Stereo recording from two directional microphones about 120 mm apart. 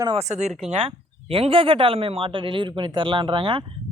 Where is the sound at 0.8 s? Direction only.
50° right (ahead or behind).